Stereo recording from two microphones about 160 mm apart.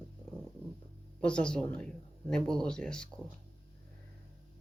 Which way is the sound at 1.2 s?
5° left (ahead or behind).